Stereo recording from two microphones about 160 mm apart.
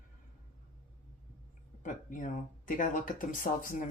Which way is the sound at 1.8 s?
55° left (ahead or behind).